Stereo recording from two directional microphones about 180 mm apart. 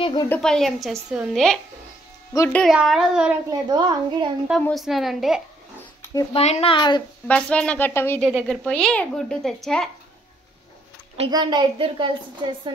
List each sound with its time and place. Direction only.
0.0 s a woman's voice: 25° left (ahead or behind)
0.3 s speech: 5° left (ahead or behind)
2.3 s speech: 15° left (ahead or behind)
2.6 s speech: centre (ahead or behind)
3.4 s a woman's voice: 25° right (ahead or behind)
4.5 s speech: 5° left (ahead or behind)
6.3 s speech: 35° left (ahead or behind)
7.2 s speech: 5° left (ahead or behind)
8.2 s speech: centre (ahead or behind)
11.2 s a woman's voice: 25° right (ahead or behind)